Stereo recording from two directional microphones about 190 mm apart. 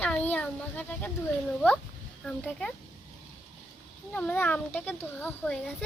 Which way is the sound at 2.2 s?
5° left (ahead or behind).